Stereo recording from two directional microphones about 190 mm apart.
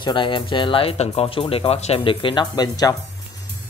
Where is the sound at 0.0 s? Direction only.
25° left (ahead or behind).